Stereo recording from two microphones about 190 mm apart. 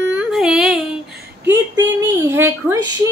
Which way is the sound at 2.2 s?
15° right (ahead or behind).